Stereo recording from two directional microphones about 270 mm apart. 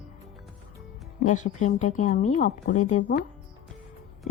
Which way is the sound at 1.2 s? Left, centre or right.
Left.